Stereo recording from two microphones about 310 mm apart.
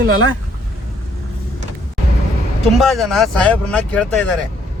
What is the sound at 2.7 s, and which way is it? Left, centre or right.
Speech, centre.